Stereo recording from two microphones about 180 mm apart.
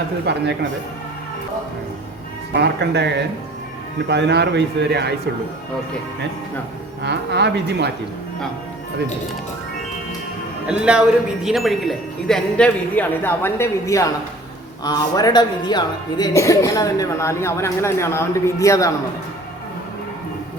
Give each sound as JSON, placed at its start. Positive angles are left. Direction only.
{"t": 0.3, "sound": "a man's voice", "side_deg": -70}
{"t": 2.6, "sound": "a man's voice", "side_deg": -70}
{"t": 7.0, "sound": "a man's voice", "side_deg": -70}
{"t": 10.7, "sound": "a man's voice", "side_deg": -5}